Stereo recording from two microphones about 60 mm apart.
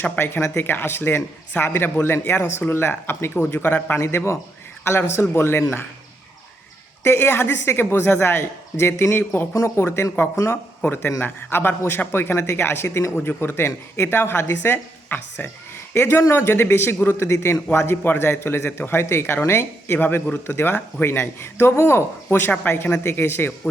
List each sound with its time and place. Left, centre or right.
0.0 s speech: left
7.0 s speech: left
13.1 s speech: left
17.2 s speech: left
17.7 s speech: left